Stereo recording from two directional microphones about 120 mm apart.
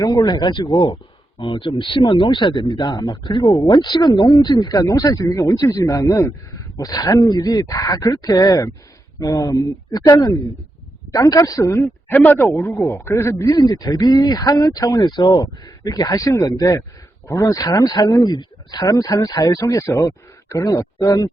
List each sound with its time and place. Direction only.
0.0 s speech: 30° left (ahead or behind)
1.4 s speech: 45° left (ahead or behind); by 21.2 s 25° left (ahead or behind)